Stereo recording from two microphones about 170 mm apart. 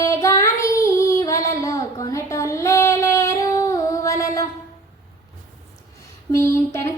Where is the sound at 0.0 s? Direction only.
20° left (ahead or behind).